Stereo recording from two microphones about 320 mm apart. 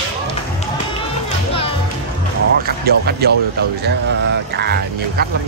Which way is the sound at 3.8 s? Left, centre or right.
Right.